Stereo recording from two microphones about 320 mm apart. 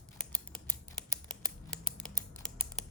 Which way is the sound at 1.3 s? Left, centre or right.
Centre.